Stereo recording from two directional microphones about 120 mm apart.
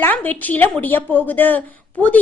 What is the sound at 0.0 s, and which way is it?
A woman's voice, 15° left (ahead or behind).